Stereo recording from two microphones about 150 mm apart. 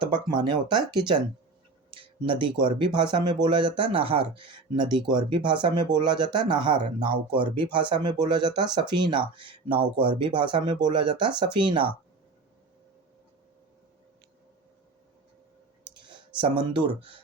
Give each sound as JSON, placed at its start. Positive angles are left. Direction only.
{"t": 0.0, "sound": "speech", "side_deg": -30}
{"t": 16.0, "sound": "speech", "side_deg": -30}